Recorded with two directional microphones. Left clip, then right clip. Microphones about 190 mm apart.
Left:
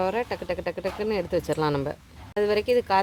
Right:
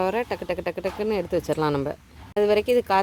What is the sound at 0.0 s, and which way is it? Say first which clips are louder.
Speech: right 2 dB; 25° right (ahead or behind).